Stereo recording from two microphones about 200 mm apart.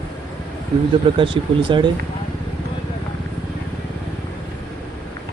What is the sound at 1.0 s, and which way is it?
Speech, 25° right (ahead or behind).